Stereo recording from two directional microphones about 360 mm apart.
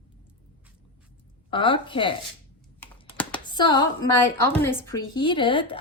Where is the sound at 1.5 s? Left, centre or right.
Centre.